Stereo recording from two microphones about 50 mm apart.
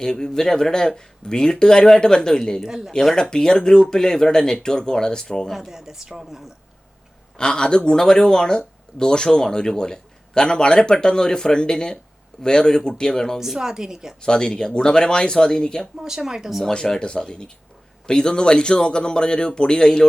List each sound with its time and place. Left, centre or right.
0.0 s speech: centre
2.6 s speech: centre
3.2 s speech: centre
5.5 s speech: centre
7.3 s speech: centre
13.4 s speech: centre
14.2 s speech: centre
16.0 s speech: centre
16.6 s speech: centre